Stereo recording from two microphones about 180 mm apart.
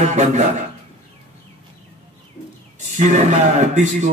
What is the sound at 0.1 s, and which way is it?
Speech, 40° right (ahead or behind).